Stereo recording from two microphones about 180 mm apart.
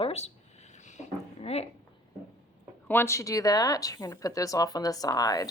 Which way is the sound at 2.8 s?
10° left (ahead or behind).